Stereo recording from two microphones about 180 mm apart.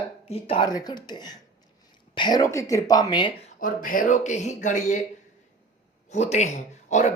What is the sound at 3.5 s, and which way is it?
Speech, 50° left (ahead or behind).